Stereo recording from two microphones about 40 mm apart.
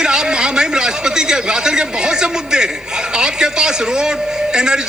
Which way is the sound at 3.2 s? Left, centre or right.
Centre.